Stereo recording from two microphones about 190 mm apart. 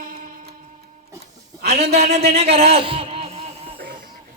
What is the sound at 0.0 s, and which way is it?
Music, 45° right (ahead or behind).